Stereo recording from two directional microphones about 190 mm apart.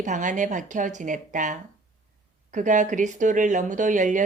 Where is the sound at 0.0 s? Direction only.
40° right (ahead or behind).